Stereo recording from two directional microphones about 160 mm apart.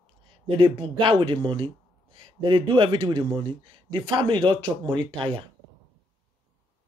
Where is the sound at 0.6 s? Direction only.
30° right (ahead or behind).